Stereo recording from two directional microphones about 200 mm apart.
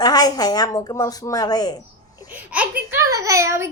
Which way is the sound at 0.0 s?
20° left (ahead or behind).